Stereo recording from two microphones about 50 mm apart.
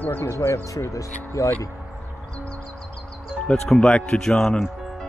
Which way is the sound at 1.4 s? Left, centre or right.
Left.